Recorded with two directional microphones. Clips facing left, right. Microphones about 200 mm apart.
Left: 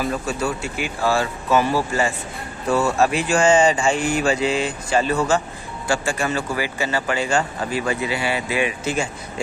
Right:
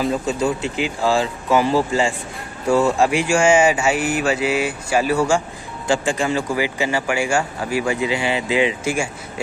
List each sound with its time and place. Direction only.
0.0 s speech: 20° right (ahead or behind)